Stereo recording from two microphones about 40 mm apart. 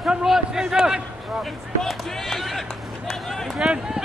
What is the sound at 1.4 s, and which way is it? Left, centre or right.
Speech, centre.